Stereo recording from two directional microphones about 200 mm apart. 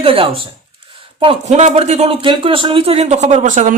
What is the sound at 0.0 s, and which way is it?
Speech, 25° right (ahead or behind).